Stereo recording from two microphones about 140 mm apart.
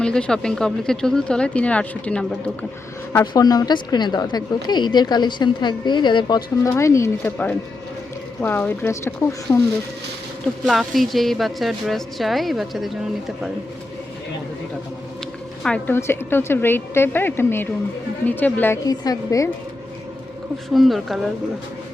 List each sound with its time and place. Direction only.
0.0 s speech: 5° left (ahead or behind)
3.1 s a woman's voice: 25° left (ahead or behind)
10.4 s speech: centre (ahead or behind)
15.6 s speech: 10° left (ahead or behind)
18.9 s a woman's voice: 25° left (ahead or behind)
20.7 s speech: centre (ahead or behind)